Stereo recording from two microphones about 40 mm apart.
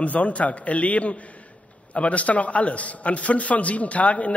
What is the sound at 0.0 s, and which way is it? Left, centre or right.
A man's voice, left.